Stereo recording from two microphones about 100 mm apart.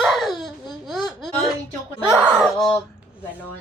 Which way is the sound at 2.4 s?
Centre (ahead or behind).